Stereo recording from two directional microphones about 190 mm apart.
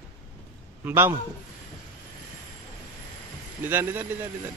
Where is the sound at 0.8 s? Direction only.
10° right (ahead or behind).